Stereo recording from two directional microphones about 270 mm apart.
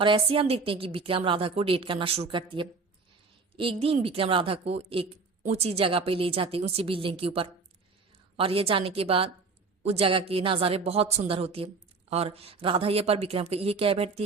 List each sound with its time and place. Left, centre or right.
0.0 s a woman's voice: centre